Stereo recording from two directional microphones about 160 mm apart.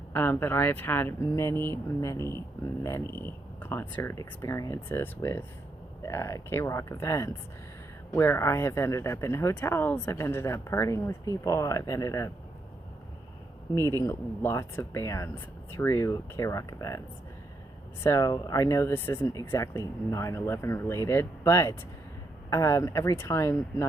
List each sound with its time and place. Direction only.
0.1 s speech: 15° left (ahead or behind)
14.0 s speech: 15° left (ahead or behind)
18.0 s speech: 20° left (ahead or behind)